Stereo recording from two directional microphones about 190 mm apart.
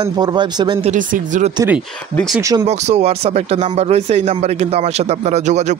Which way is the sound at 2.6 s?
35° right (ahead or behind).